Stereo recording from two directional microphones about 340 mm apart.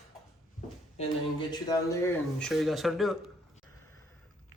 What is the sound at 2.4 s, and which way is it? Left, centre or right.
Speech, centre.